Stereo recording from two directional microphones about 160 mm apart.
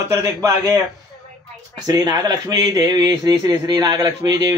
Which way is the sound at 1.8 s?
25° right (ahead or behind).